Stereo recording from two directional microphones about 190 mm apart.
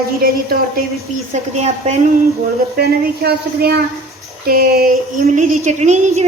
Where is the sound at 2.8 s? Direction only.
55° right (ahead or behind).